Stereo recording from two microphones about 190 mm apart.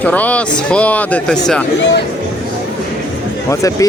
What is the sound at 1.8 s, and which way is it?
Speech, 65° left (ahead or behind).